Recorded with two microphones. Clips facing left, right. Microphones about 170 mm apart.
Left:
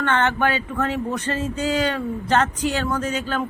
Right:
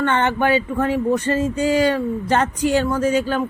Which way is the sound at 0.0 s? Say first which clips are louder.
Right 2 dB; 10° right (ahead or behind).